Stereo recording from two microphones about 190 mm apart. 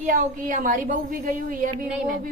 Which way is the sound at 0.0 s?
45° right (ahead or behind).